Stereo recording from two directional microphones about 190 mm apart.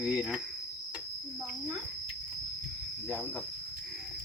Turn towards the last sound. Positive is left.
turn(degrees=-5)  # may be behind; listen again after turning